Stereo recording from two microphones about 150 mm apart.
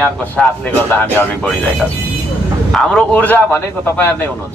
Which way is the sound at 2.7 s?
5° left (ahead or behind).